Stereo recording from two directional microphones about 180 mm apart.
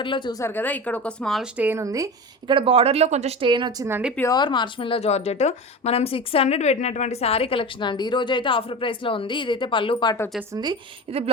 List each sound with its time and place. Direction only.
0.0 s a woman's voice: 25° left (ahead or behind); by 2.0 s 20° right (ahead or behind)
2.5 s speech: 30° right (ahead or behind); by 4.1 s 10° right (ahead or behind)
4.3 s a woman's voice: 25° left (ahead or behind)
10.5 s speech: 25° right (ahead or behind)